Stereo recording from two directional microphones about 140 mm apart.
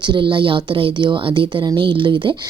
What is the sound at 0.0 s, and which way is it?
A woman's voice, 35° right (ahead or behind).